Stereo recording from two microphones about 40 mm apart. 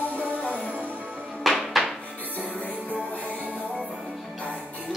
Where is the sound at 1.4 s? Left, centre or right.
Centre.